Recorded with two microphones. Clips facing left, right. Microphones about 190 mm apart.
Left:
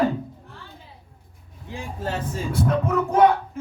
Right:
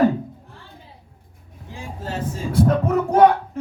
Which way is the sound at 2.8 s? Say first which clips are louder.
Right 3 dB; 40° right (ahead or behind).